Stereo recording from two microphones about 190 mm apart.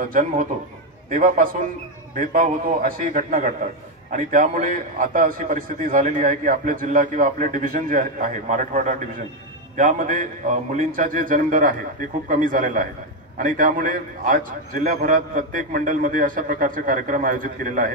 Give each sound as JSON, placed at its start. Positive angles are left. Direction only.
{"t": 0.1, "sound": "a man's voice", "side_deg": -45}